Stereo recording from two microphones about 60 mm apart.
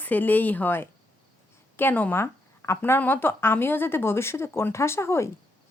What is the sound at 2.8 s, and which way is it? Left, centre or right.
Speech, left.